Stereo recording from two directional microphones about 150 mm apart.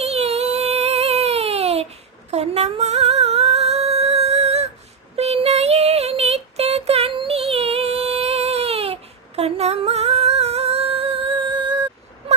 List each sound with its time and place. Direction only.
0.0 s a sound: 45° right (ahead or behind)
2.3 s singing: 45° right (ahead or behind)
5.1 s child singing: 45° right (ahead or behind)